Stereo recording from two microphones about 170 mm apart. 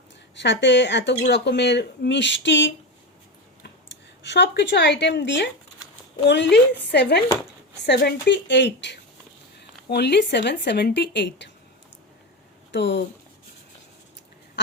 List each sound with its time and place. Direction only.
0.3 s speech: 90° left
4.2 s speech: 90° left
7.9 s speech: 80° left
9.9 s speech: 75° left (ahead or behind)
12.7 s speech: 90° left